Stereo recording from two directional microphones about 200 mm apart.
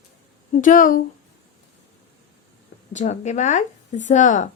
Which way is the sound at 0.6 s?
40° left (ahead or behind).